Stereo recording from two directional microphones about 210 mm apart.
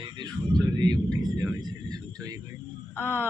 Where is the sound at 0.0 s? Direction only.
20° right (ahead or behind).